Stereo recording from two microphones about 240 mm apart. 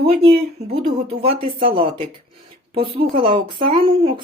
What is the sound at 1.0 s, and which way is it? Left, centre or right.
Speech, right.